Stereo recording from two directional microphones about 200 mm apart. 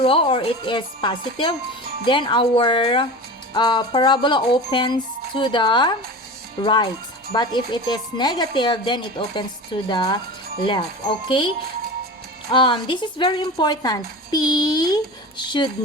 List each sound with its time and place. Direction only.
0.0 s speech: 25° left (ahead or behind)
11.3 s speech: 25° left (ahead or behind)